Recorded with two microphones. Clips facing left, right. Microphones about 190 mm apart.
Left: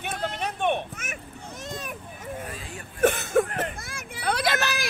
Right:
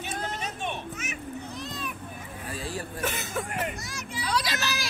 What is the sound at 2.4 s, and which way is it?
Vehicle, 30° right (ahead or behind).